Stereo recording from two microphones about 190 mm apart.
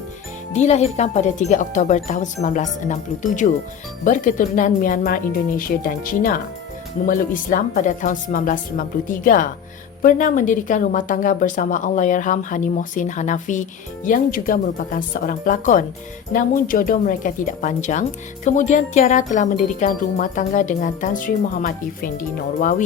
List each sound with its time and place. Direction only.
0.5 s speech: 35° left (ahead or behind)
4.0 s wind chime: 45° left (ahead or behind)